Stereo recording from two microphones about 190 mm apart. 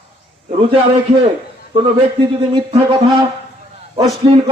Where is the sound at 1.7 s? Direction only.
25° right (ahead or behind).